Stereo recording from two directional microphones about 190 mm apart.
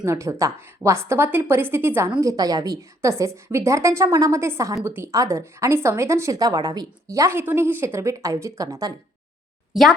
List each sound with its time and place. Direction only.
0.0 s a woman's voice: 15° right (ahead or behind)